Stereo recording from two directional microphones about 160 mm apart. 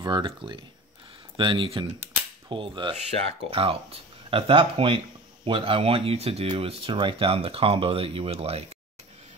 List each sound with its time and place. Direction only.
0.0 s speech: 30° right (ahead or behind)